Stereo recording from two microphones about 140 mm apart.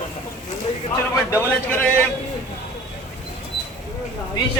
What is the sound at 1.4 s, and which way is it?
Speech, 15° left (ahead or behind).